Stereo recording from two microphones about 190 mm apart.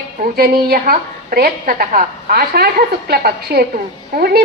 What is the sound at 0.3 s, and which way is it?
Speech, 55° right (ahead or behind).